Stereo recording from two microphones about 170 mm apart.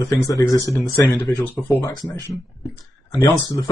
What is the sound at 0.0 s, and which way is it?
Speech, 20° left (ahead or behind).